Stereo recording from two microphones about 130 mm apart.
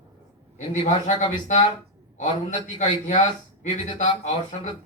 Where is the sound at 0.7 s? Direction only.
65° left (ahead or behind).